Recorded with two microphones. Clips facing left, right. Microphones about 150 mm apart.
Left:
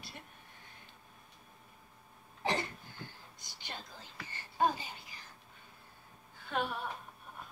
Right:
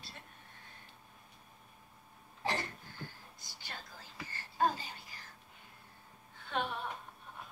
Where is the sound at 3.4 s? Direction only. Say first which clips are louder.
Left 3 dB; 20° left (ahead or behind).